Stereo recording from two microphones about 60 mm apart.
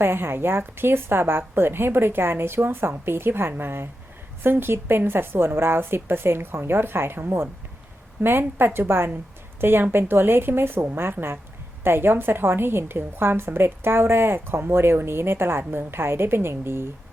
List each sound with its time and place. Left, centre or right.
0.0 s a woman's voice: right